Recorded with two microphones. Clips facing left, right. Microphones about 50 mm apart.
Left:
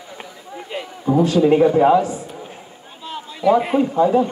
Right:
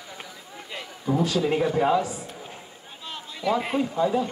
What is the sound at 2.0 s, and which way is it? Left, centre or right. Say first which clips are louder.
Speech: left 7 dB; left.